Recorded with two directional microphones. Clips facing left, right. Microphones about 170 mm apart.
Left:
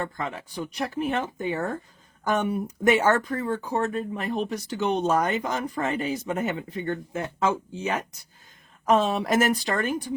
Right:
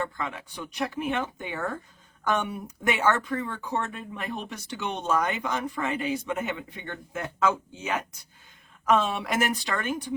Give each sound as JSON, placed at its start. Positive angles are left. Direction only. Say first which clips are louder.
{"t": 0.2, "sound": "speech", "louder": "left 3 dB", "side_deg": 35}